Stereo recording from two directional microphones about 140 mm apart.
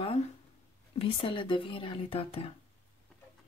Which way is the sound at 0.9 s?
40° left (ahead or behind).